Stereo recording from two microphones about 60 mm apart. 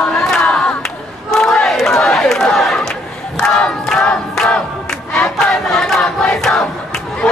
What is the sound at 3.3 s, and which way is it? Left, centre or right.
Crowd, centre.